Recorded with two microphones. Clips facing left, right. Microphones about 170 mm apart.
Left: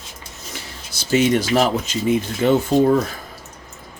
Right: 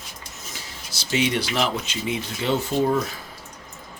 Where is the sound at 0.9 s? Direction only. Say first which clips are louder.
Left 6 dB; 45° left (ahead or behind).